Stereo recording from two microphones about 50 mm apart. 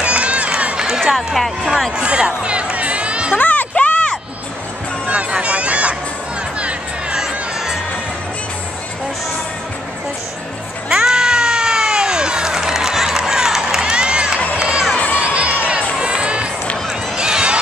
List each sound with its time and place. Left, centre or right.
0.0 s run: right
0.8 s music: centre
1.1 s speech: centre
2.0 s music: centre
3.3 s a sound: left
5.0 s music: right
7.2 s music: centre
10.9 s a sound: centre
14.6 s crowd: centre
17.2 s run: centre